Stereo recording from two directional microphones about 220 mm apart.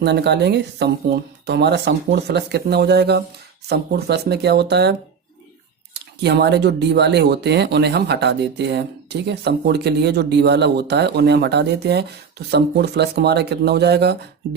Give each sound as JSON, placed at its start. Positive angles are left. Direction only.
{"t": 0.0, "sound": "speech", "side_deg": -50}